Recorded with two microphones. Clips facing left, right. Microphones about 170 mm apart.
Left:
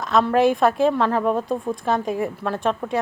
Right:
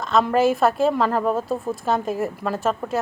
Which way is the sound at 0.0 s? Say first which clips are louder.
Even; centre (ahead or behind).